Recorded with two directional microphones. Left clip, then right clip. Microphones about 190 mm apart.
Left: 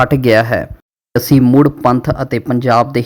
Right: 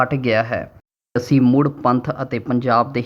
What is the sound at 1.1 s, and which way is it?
Speech, 35° left (ahead or behind).